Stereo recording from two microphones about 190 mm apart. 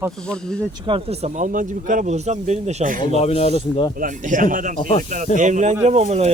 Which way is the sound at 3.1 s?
30° left (ahead or behind).